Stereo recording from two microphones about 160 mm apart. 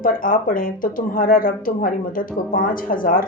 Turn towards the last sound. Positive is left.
turn(degrees=60)  # may be behind; listen again after turning